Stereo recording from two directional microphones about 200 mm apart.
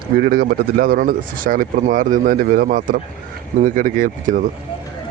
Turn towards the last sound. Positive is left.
turn(degrees=-40)  # may be behind; listen again after turning